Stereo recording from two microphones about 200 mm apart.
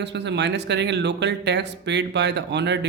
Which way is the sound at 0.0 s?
60° right (ahead or behind).